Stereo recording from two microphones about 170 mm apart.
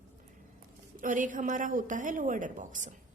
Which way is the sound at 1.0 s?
50° right (ahead or behind).